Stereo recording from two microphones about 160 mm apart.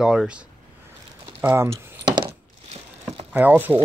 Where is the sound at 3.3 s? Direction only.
10° right (ahead or behind).